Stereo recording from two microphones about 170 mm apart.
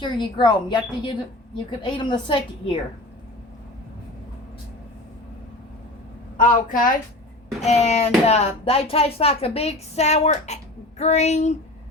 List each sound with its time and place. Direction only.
0.0 s speech: 25° left (ahead or behind)
6.3 s a woman's voice: 50° left (ahead or behind)
7.6 s speech: 40° left (ahead or behind)